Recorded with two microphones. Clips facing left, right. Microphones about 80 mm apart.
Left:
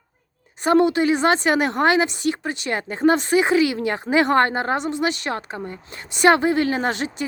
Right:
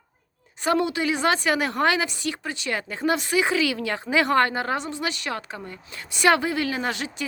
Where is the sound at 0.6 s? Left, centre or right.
Left.